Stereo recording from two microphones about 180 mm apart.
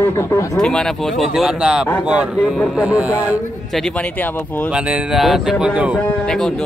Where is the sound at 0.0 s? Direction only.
15° left (ahead or behind).